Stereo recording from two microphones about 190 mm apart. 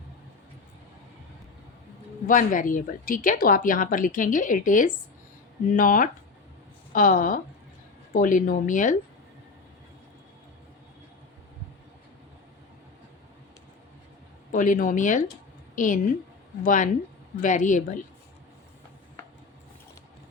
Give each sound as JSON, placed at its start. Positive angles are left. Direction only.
{"t": 2.2, "sound": "speech", "side_deg": 45}
{"t": 14.5, "sound": "a woman's voice", "side_deg": 45}